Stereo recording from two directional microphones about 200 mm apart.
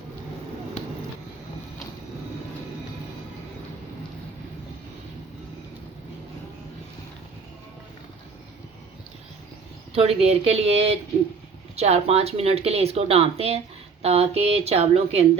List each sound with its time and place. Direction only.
9.9 s speech: 30° right (ahead or behind)